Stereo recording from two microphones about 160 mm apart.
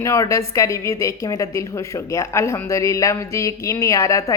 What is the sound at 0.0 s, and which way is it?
A woman's voice, 20° left (ahead or behind).